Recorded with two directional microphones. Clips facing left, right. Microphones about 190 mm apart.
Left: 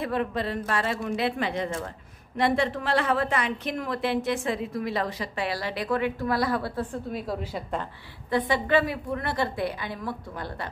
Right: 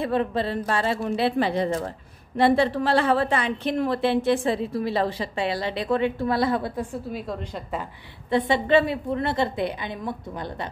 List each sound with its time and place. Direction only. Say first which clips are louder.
0.0 s a woman's voice: right 4 dB; 30° right (ahead or behind); by 7.0 s 15° right (ahead or behind)
7.1 s a woman's voice: even; centre (ahead or behind)
8.3 s a woman's voice: right 4 dB; 25° right (ahead or behind)